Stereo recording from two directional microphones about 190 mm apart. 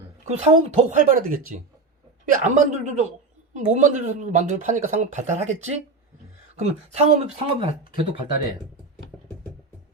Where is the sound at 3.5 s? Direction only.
40° right (ahead or behind).